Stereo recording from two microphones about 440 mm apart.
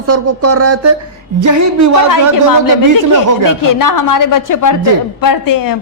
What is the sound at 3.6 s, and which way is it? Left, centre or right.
A woman's voice, left.